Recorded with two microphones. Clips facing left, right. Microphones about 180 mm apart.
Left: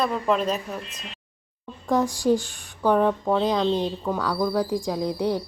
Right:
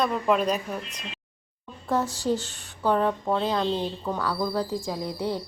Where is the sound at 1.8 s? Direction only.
15° left (ahead or behind).